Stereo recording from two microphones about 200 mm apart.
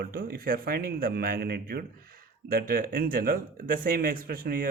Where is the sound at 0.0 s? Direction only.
45° right (ahead or behind).